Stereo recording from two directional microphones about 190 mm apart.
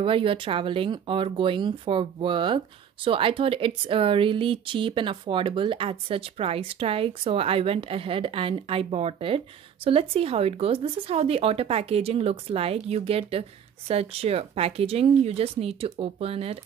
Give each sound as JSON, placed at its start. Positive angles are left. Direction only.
{"t": 0.0, "sound": "speech", "side_deg": -30}